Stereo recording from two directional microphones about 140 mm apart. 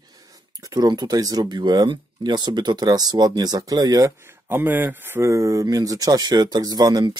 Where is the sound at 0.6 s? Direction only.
25° right (ahead or behind).